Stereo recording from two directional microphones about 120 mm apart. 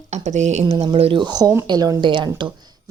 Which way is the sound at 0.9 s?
55° right (ahead or behind).